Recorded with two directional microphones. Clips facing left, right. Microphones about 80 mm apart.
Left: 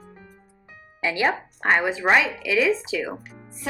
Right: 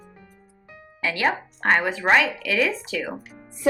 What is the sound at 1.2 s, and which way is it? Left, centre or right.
Speech, centre.